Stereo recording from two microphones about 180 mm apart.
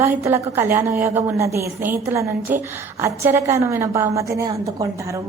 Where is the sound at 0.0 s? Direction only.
15° right (ahead or behind).